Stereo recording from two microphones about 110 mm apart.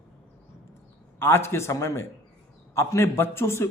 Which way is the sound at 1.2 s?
20° left (ahead or behind).